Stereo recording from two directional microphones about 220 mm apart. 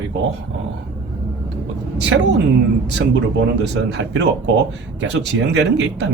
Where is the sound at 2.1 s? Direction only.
60° right (ahead or behind).